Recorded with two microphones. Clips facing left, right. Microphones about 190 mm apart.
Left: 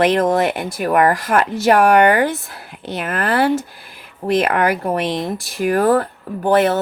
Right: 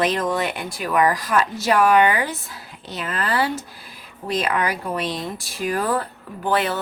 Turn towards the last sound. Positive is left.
turn(degrees=50)  # may be behind; listen again after turning